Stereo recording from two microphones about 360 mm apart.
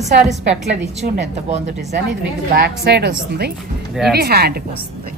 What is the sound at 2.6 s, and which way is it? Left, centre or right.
A woman's voice, right.